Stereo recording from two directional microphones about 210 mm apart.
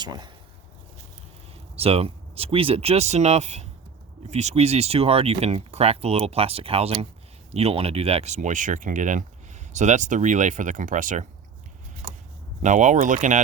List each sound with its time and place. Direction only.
0.0 s speech: 20° right (ahead or behind)
1.7 s speech: 30° right (ahead or behind)
12.6 s speech: 35° right (ahead or behind)